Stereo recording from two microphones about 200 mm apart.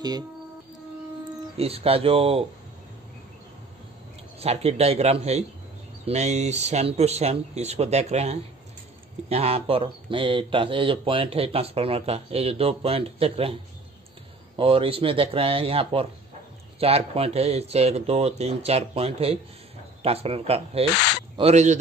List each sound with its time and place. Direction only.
1.6 s speech: 30° right (ahead or behind)
4.4 s speech: 30° right (ahead or behind)
14.6 s speech: 25° right (ahead or behind)